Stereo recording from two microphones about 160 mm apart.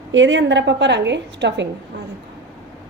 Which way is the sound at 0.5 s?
90° right.